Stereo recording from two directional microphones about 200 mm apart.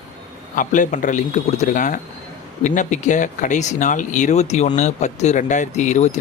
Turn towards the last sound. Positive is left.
turn(degrees=35)  # may be behind; listen again after turning